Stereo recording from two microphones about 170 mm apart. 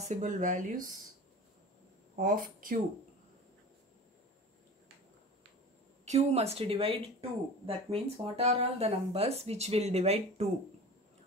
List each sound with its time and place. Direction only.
0.1 s speech: 50° right (ahead or behind)
2.1 s speech: 55° right (ahead or behind)
6.0 s speech: 40° right (ahead or behind)